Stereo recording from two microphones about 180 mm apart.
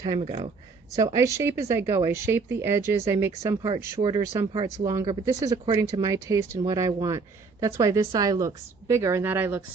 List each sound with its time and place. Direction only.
0.2 s speech: 30° right (ahead or behind)
0.9 s speech: 20° right (ahead or behind)